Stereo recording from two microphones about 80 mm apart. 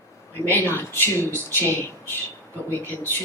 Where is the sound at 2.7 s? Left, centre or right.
Left.